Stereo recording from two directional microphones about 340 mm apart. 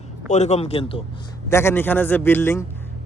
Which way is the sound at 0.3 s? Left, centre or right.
Centre.